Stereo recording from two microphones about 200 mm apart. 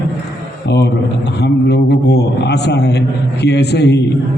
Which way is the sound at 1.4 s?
55° left (ahead or behind).